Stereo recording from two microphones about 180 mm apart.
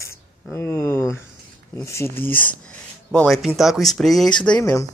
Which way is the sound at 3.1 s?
Centre (ahead or behind).